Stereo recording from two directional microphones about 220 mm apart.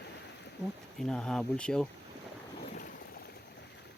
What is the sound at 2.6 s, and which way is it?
Vehicle, 40° left (ahead or behind).